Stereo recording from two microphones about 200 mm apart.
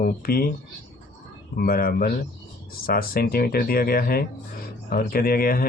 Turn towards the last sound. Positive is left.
turn(degrees=45)  # may be behind; listen again after turning